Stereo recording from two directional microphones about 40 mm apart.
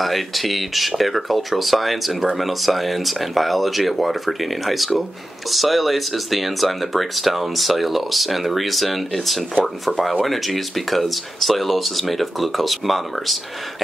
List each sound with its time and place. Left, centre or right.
0.0 s speech: centre